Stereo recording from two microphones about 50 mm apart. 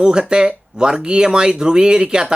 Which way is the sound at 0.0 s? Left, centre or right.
Centre.